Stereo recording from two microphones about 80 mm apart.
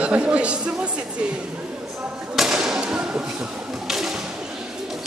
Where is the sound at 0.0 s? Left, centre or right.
Centre.